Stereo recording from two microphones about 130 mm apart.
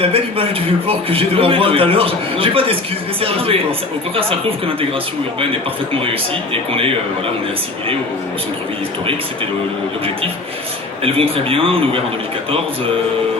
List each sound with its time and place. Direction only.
0.0 s a man's voice: 45° right (ahead or behind)
6.5 s a man's voice: 45° right (ahead or behind)
11.0 s a man's voice: 45° right (ahead or behind)